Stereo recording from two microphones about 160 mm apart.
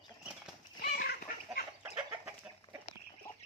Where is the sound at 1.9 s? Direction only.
15° right (ahead or behind).